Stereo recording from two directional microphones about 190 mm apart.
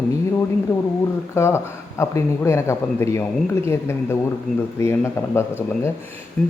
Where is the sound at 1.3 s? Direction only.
15° left (ahead or behind).